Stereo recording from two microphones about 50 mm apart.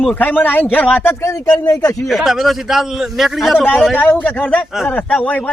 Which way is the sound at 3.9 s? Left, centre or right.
Left.